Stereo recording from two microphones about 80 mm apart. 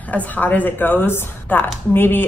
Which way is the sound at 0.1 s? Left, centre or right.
Left.